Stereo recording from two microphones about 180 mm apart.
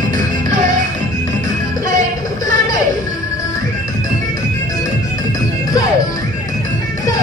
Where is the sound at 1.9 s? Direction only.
20° left (ahead or behind).